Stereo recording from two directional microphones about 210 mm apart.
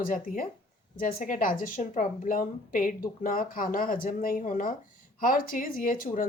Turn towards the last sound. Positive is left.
turn(degrees=40)  # may be behind; listen again after turning